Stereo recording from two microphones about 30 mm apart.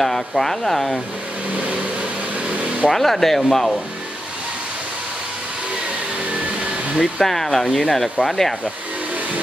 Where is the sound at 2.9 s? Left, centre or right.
Centre.